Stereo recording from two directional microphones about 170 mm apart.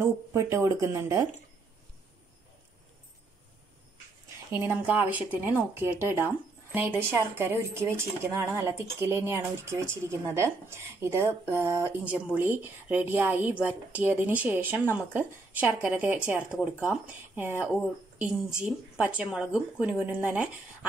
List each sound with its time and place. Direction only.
0.0 s speech: 15° right (ahead or behind)
4.5 s speech: 10° right (ahead or behind)